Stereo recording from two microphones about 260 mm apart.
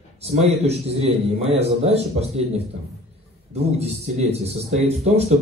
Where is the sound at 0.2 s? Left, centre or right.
Right.